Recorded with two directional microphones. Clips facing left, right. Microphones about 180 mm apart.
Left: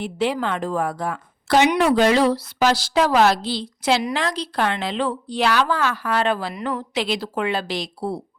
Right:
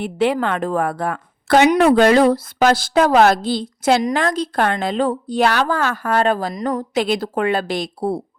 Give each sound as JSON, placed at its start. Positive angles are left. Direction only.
{"t": 0.0, "sound": "a woman's voice", "side_deg": -55}